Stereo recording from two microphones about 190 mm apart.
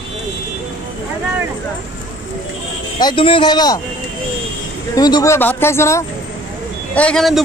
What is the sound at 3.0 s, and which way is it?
Speech, 25° left (ahead or behind).